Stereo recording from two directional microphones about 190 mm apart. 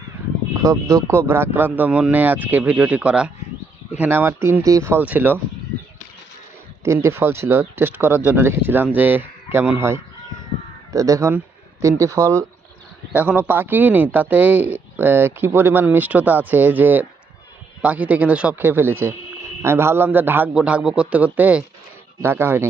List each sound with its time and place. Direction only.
0.6 s speech: 15° right (ahead or behind)
6.8 s speech: 15° right (ahead or behind)